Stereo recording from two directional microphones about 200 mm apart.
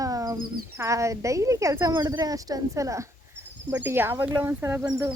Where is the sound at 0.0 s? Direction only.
15° right (ahead or behind).